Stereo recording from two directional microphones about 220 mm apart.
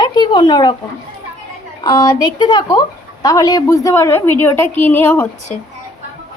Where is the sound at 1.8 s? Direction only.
15° left (ahead or behind).